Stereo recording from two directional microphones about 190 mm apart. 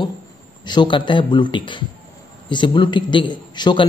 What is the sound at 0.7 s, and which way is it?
A man's voice, 25° left (ahead or behind).